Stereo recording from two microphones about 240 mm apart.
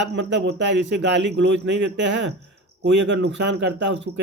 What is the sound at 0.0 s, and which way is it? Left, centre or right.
Speech, right.